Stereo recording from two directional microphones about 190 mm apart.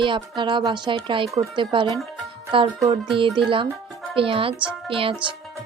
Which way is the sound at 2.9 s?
25° right (ahead or behind).